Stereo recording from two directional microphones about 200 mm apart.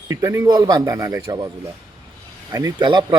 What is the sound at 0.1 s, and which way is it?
A man's voice, 15° right (ahead or behind).